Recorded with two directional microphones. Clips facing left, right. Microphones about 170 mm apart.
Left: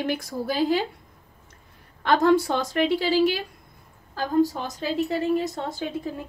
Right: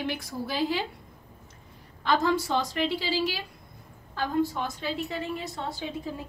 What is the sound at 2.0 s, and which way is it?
A woman's voice, 60° left (ahead or behind).